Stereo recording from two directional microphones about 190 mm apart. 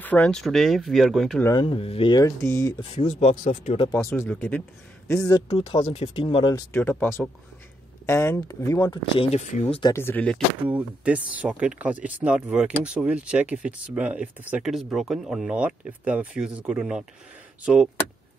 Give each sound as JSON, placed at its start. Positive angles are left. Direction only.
{"t": 0.0, "sound": "speech", "side_deg": 5}
{"t": 1.4, "sound": "speech", "side_deg": 25}
{"t": 2.4, "sound": "a man's voice", "side_deg": 10}
{"t": 2.8, "sound": "speech", "side_deg": 35}
{"t": 4.0, "sound": "a man's voice", "side_deg": 15}
{"t": 6.7, "sound": "a man's voice", "side_deg": 10}
{"t": 9.3, "sound": "speech", "side_deg": 35}
{"t": 9.9, "sound": "a man's voice", "side_deg": 10}
{"t": 10.7, "sound": "speech", "side_deg": -10}